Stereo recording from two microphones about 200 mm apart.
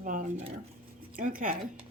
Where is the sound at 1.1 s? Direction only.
45° right (ahead or behind).